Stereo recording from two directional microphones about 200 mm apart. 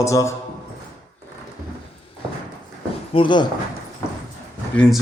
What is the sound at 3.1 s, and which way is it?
Speech, 25° left (ahead or behind).